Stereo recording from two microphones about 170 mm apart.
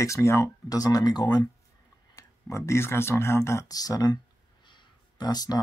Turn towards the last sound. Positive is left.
turn(degrees=25)  # may be behind; listen again after turning